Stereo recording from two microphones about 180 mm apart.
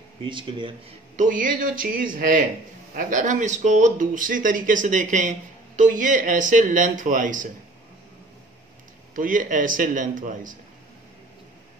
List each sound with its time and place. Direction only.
0.2 s speech: 25° right (ahead or behind)
1.1 s speech: 45° right (ahead or behind)
9.1 s speech: 45° right (ahead or behind)